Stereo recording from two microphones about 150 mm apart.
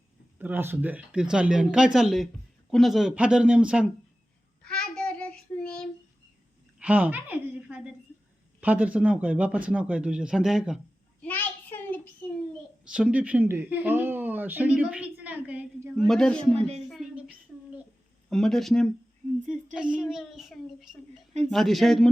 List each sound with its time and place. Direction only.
0.3 s speech: 15° right (ahead or behind)
4.6 s child singing: 5° left (ahead or behind)
6.7 s a sound: 10° right (ahead or behind)
8.6 s a man's voice: 10° right (ahead or behind)
11.2 s a sound: 10° left (ahead or behind)
12.8 s speech: 5° right (ahead or behind)
16.0 s speech: centre (ahead or behind)
16.6 s speech: 45° right (ahead or behind)
16.9 s a sound: 5° right (ahead or behind)
18.3 s speech: centre (ahead or behind)